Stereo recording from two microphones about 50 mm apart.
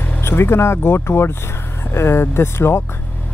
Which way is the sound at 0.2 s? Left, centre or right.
Left.